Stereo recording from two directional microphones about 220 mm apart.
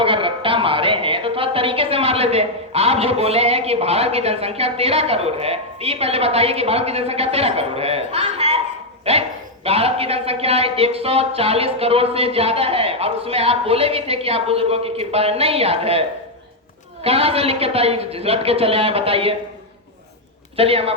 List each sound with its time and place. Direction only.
0.0 s speech: 25° right (ahead or behind)
20.6 s speech: 25° right (ahead or behind)